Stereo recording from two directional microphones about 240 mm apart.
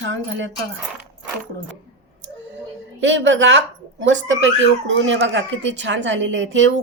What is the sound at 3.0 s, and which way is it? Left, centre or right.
A woman's voice, right.